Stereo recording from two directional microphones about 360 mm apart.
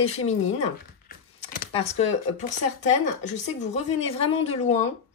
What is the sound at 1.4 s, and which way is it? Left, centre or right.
Computer keyboard, centre.